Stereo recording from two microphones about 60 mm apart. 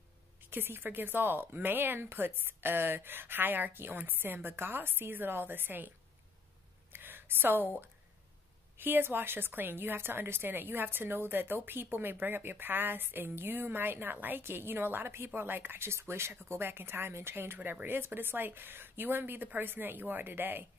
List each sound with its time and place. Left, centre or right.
0.5 s a woman's voice: right
6.9 s a sound: right
8.7 s a woman's voice: right
17.6 s speech: right
17.8 s a woman's voice: right